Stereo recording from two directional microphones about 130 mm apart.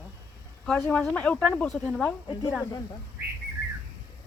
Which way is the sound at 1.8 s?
Centre (ahead or behind).